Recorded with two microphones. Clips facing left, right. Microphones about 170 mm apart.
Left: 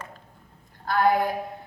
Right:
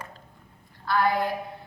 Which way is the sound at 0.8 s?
50° left (ahead or behind).